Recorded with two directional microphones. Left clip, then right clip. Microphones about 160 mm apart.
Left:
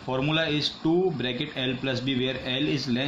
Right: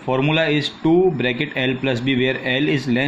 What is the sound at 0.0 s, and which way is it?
Speech, 15° right (ahead or behind).